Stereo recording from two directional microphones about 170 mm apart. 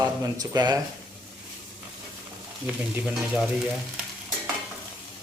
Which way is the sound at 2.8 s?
10° right (ahead or behind).